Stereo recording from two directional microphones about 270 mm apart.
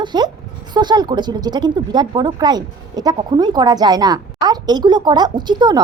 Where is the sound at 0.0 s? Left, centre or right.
Centre.